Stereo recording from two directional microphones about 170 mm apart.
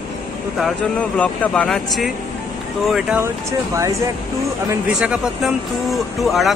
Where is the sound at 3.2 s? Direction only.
20° right (ahead or behind).